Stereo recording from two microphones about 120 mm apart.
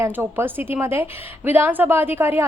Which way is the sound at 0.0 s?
20° right (ahead or behind).